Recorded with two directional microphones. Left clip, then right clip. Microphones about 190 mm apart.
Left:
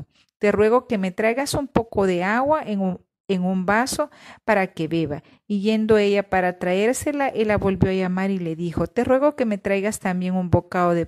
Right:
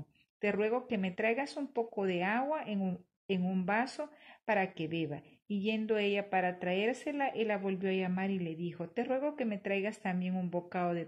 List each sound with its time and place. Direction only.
0.4 s a woman's voice: 50° left (ahead or behind)